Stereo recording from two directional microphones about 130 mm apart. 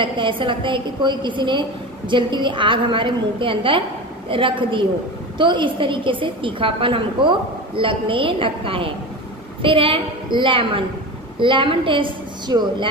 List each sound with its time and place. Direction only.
0.0 s a woman's voice: 40° right (ahead or behind)